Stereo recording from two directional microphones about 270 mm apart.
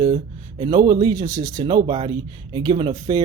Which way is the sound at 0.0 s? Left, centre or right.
Centre.